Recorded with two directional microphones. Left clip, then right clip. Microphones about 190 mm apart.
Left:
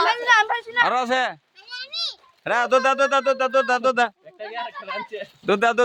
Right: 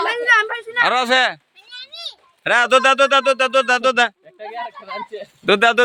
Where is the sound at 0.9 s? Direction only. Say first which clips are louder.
Right 5 dB; 15° right (ahead or behind).